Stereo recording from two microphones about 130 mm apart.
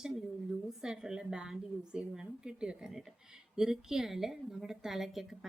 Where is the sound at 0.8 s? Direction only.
5° right (ahead or behind).